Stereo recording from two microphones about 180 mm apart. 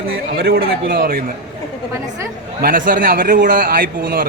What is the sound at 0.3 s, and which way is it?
Speech, 65° right (ahead or behind).